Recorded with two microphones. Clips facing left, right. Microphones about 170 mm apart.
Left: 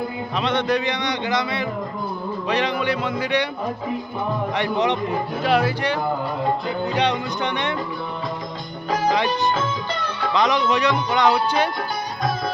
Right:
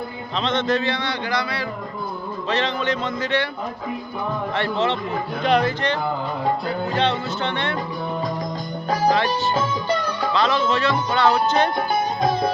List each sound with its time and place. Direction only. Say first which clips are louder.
0.4 s music: even; 10° left (ahead or behind)
4.5 s music: left 1 dB; 15° left (ahead or behind)
9.1 s music: even; 15° left (ahead or behind)